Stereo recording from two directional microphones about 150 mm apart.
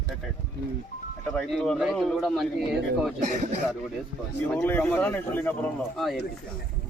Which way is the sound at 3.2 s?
50° right (ahead or behind).